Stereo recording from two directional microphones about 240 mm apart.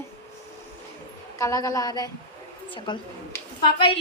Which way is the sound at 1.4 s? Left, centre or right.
Centre.